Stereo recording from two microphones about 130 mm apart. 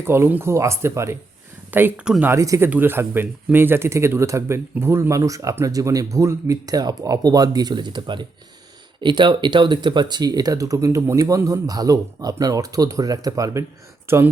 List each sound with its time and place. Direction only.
0.0 s speech: 20° right (ahead or behind)
1.7 s speech: 10° right (ahead or behind)
2.3 s speech: 20° right (ahead or behind)